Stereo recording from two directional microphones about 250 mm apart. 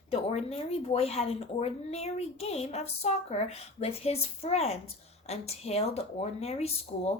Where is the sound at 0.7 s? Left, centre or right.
Left.